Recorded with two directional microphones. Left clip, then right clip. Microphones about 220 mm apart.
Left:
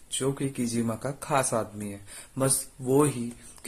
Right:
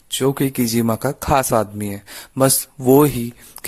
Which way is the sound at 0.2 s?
50° right (ahead or behind).